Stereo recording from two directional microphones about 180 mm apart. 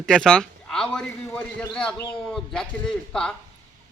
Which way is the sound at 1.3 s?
15° left (ahead or behind).